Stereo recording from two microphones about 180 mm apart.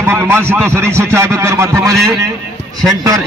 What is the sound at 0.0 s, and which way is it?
A man's voice, 10° right (ahead or behind).